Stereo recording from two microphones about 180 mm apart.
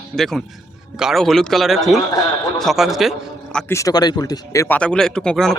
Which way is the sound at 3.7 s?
20° left (ahead or behind).